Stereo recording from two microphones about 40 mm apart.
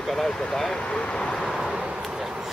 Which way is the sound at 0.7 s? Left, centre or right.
Left.